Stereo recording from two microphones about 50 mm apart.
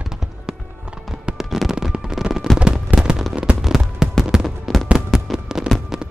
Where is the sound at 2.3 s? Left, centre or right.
Centre.